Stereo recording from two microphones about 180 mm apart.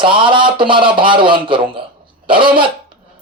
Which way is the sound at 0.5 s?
30° right (ahead or behind).